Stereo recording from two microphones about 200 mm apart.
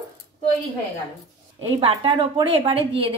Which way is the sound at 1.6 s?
25° right (ahead or behind).